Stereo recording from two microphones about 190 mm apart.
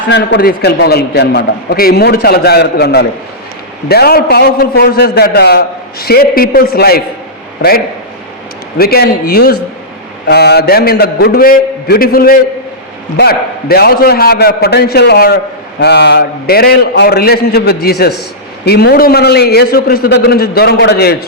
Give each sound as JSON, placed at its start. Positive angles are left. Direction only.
{"t": 0.1, "sound": "a man's voice", "side_deg": 60}
{"t": 8.8, "sound": "a man's voice", "side_deg": 55}